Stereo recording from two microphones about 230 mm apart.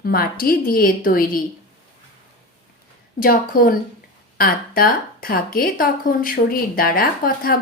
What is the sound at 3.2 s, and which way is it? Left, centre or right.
A woman's voice, left.